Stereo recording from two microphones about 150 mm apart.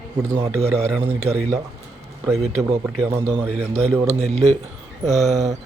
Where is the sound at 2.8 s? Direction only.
15° right (ahead or behind).